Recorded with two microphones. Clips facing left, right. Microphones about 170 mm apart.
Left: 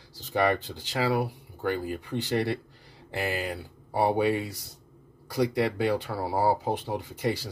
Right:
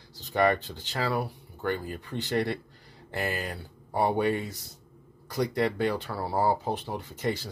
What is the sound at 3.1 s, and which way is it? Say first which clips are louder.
Speech: left 2 dB; centre (ahead or behind).